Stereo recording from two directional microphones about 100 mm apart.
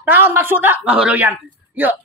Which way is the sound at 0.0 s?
20° right (ahead or behind).